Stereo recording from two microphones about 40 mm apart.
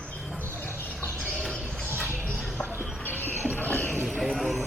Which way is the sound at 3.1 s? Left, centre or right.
Left.